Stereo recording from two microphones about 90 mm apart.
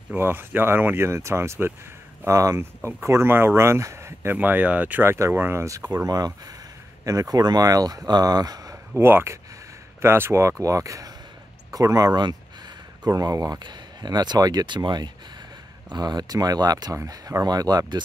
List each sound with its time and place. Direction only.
0.1 s speech: 25° right (ahead or behind)
6.0 s speech: 45° right (ahead or behind)
8.9 s speech: 30° right (ahead or behind)
12.2 s speech: 50° right (ahead or behind)